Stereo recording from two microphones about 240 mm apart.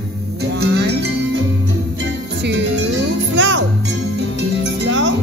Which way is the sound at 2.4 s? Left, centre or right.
Right.